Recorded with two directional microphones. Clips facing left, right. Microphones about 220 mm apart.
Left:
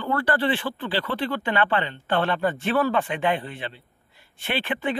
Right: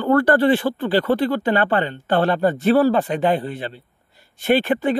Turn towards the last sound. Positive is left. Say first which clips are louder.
# right 9 dB
turn(degrees=-40)  # may be behind; listen again after turning